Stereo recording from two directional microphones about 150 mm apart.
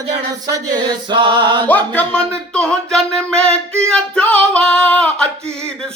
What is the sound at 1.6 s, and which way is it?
Speech, 10° left (ahead or behind).